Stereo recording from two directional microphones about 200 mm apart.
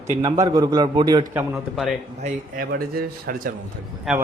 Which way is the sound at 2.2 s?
45° right (ahead or behind).